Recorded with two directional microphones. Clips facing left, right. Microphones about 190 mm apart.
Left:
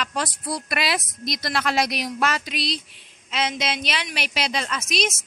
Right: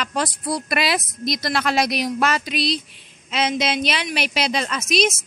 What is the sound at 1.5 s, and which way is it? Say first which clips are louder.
Speech: right 2 dB; 30° right (ahead or behind).